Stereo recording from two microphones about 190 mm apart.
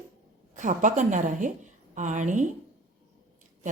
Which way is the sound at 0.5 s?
40° right (ahead or behind).